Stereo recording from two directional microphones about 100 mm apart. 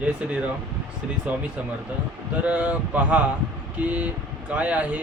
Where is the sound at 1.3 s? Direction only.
10° right (ahead or behind).